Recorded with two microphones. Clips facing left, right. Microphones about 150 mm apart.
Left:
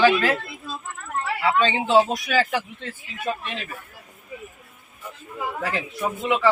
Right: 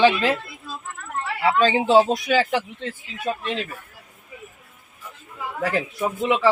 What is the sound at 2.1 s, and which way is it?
A man's voice, 20° right (ahead or behind).